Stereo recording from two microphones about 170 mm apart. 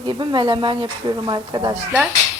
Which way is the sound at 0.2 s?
25° right (ahead or behind).